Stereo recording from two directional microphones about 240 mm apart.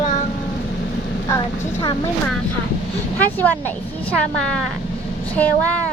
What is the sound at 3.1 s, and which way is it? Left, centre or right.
Vehicle, centre.